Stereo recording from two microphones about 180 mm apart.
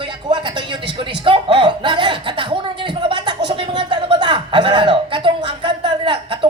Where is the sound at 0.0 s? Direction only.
25° right (ahead or behind).